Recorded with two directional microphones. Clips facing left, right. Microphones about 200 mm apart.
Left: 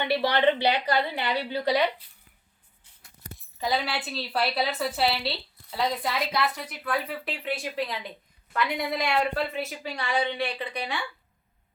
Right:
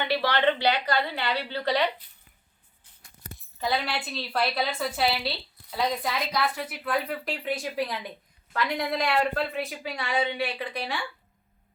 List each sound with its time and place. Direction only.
0.0 s a woman's voice: 20° left (ahead or behind)
3.3 s speech: centre (ahead or behind)